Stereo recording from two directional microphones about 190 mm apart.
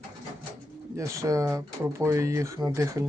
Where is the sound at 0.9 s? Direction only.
15° right (ahead or behind).